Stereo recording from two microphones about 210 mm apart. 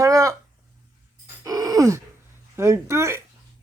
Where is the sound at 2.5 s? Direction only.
10° right (ahead or behind).